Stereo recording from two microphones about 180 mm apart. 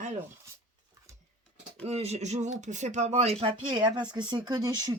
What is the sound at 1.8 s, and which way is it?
Speech, 35° right (ahead or behind).